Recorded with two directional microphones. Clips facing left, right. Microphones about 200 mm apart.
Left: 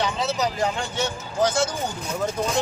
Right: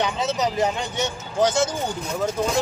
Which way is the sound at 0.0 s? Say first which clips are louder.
Right 1 dB; 20° right (ahead or behind).